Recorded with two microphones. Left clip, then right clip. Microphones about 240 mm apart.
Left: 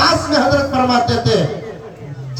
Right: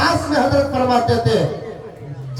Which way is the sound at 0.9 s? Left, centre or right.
Left.